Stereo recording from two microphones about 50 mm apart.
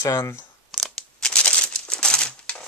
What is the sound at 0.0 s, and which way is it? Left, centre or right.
Speech, left.